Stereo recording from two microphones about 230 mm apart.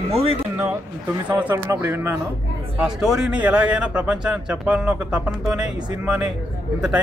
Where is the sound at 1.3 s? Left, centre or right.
Centre.